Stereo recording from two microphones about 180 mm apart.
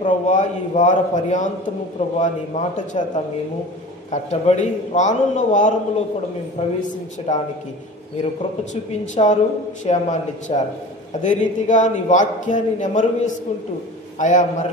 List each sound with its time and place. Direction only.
0.0 s a man's voice: 45° left (ahead or behind)
4.1 s a man's voice: 40° left (ahead or behind)
7.3 s a man's voice: 40° left (ahead or behind)
9.0 s a man's voice: 40° left (ahead or behind)